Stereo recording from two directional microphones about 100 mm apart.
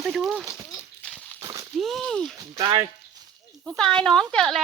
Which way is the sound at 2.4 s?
40° right (ahead or behind).